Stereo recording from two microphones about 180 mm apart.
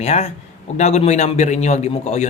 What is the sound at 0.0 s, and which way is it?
A man's voice, 35° left (ahead or behind).